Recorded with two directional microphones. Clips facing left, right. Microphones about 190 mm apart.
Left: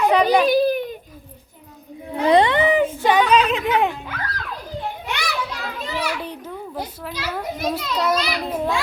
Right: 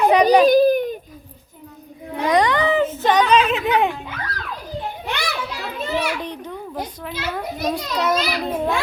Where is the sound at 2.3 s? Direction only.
25° left (ahead or behind); by 3.9 s centre (ahead or behind).